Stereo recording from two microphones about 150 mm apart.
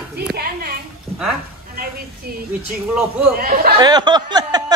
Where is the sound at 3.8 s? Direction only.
30° right (ahead or behind).